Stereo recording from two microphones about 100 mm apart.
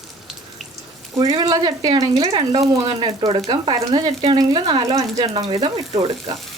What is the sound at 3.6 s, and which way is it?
Speech, 45° right (ahead or behind).